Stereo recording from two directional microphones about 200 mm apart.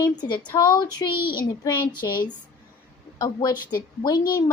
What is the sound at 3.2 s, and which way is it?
A woman's voice, 20° left (ahead or behind).